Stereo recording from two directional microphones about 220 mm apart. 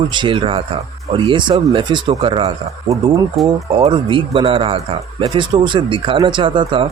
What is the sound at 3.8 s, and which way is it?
Speech, 20° right (ahead or behind).